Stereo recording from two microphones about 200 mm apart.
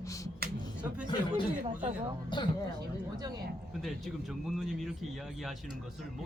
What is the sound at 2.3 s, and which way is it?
Speech, 25° left (ahead or behind).